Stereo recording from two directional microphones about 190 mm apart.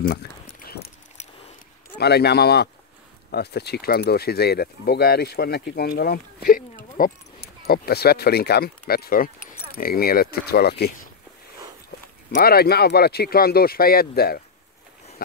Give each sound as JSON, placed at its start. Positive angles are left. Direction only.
{"t": 0.0, "sound": "a sound", "side_deg": 50}
{"t": 2.0, "sound": "speech", "side_deg": 60}
{"t": 12.4, "sound": "speech", "side_deg": 55}